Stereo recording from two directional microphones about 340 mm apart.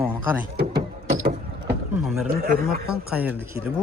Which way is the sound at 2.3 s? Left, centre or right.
Right.